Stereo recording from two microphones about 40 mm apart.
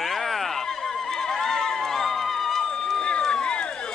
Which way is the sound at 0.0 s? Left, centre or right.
Centre.